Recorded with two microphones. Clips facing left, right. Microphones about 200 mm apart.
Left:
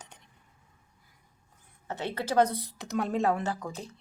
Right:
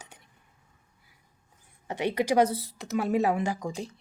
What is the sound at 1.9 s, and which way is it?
Speech, 15° right (ahead or behind).